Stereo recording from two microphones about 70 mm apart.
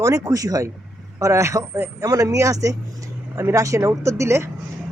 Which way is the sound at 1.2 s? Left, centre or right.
Right.